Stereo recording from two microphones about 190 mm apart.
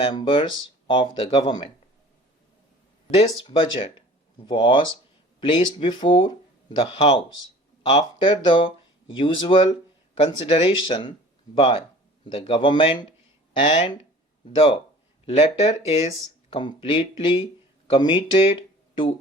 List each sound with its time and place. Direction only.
0.0 s speech: 25° left (ahead or behind)
3.2 s speech: 30° left (ahead or behind)
14.4 s speech: 30° left (ahead or behind)